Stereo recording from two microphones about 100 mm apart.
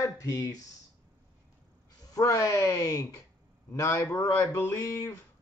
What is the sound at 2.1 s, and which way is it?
Speech, 35° left (ahead or behind).